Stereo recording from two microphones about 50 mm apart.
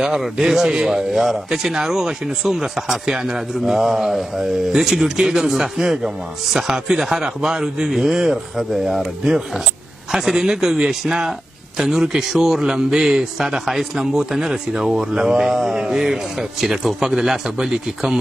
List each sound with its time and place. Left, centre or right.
0.0 s speech: centre